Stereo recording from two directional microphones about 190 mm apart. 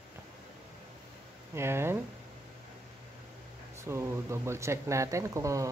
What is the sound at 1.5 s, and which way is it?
Speech, 15° right (ahead or behind).